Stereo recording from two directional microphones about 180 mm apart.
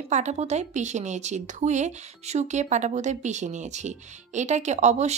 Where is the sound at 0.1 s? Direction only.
40° right (ahead or behind).